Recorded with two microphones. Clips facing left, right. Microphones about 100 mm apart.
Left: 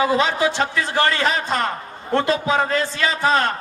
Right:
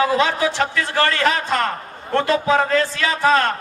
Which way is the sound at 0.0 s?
20° left (ahead or behind).